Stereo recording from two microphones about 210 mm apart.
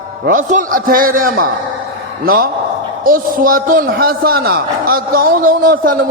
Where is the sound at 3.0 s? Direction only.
40° right (ahead or behind).